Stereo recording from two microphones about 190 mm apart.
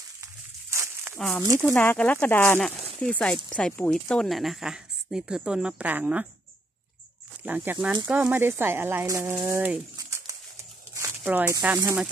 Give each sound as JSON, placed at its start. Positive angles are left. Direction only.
{"t": 0.2, "sound": "dog", "side_deg": -15}
{"t": 1.1, "sound": "speech", "side_deg": 0}
{"t": 7.4, "sound": "speech", "side_deg": -10}
{"t": 9.9, "sound": "crumpling", "side_deg": -20}
{"t": 11.0, "sound": "speech", "side_deg": -10}